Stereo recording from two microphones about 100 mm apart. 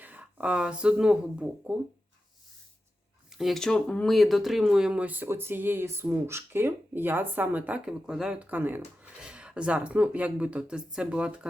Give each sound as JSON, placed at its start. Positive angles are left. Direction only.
{"t": 0.0, "sound": "speech", "side_deg": -15}
{"t": 3.3, "sound": "speech", "side_deg": 0}